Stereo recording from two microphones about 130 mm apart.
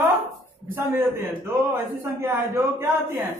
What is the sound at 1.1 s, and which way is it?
A man's voice, 20° right (ahead or behind).